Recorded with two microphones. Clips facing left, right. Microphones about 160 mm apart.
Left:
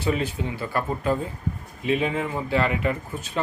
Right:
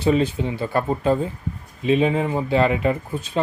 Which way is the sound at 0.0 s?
25° right (ahead or behind).